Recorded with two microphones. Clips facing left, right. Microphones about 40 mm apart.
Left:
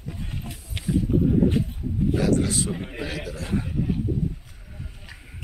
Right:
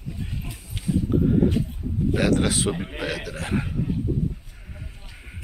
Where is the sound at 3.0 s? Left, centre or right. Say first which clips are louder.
Right 2 dB; right.